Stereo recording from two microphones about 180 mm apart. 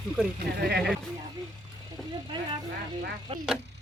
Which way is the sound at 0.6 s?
60° right (ahead or behind).